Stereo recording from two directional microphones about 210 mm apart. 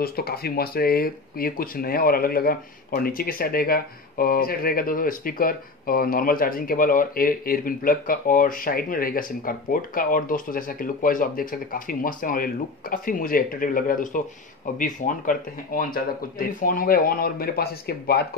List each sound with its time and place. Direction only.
0.0 s speech: 45° left (ahead or behind)